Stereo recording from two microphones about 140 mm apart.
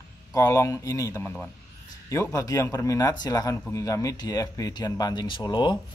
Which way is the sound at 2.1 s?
20° left (ahead or behind).